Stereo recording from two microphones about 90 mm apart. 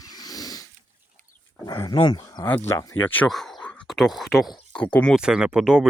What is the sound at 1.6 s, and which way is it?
Speech, 45° left (ahead or behind).